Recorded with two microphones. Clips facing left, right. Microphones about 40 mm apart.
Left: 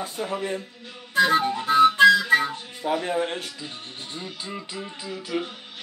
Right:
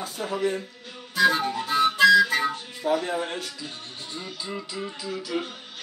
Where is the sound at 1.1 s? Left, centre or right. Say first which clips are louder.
Left 2 dB; left.